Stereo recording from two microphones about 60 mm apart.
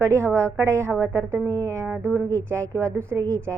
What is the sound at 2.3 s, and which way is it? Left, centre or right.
A woman's voice, right.